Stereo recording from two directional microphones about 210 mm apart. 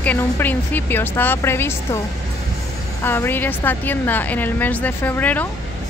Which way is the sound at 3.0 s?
10° left (ahead or behind).